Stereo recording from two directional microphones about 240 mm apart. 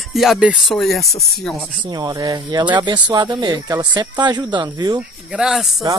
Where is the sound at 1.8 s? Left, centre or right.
Centre.